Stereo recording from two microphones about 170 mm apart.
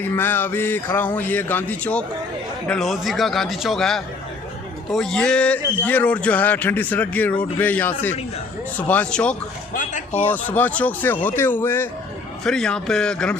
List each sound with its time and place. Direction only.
0.0 s a man's voice: 10° left (ahead or behind)
9.7 s a sound: 45° left (ahead or behind)
10.2 s a man's voice: 10° left (ahead or behind)